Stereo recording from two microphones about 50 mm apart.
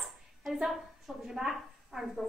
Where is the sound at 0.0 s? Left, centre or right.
Centre.